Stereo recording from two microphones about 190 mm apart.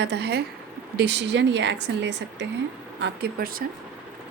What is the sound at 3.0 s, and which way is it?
Speech, 55° right (ahead or behind).